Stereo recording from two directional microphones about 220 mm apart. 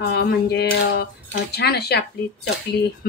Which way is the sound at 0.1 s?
50° left (ahead or behind).